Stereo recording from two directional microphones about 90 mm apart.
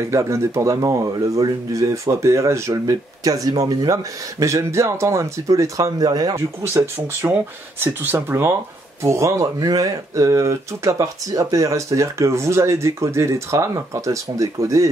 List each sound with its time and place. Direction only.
0.0 s speech: 35° right (ahead or behind)
7.1 s speech: 30° right (ahead or behind)